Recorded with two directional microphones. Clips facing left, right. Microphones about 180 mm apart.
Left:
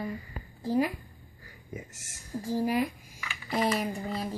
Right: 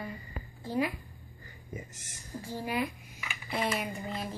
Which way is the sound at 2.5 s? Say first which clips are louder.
Left 6 dB; 40° left (ahead or behind).